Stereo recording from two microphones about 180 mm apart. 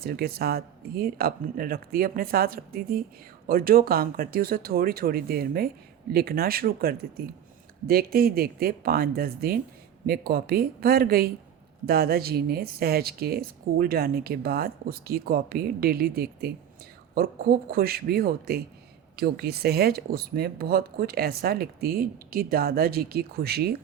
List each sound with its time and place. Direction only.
0.0 s speech: 60° right (ahead or behind)